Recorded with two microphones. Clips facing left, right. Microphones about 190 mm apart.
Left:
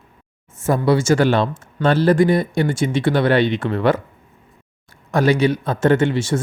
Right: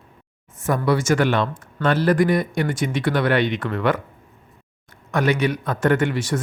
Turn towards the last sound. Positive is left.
turn(degrees=25)  # may be behind; listen again after turning